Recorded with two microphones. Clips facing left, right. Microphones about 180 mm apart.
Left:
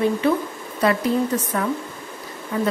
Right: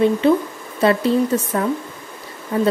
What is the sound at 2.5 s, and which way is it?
Speech, 35° right (ahead or behind).